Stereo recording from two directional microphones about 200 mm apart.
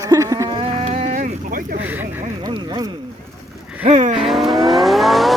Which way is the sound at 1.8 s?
10° right (ahead or behind).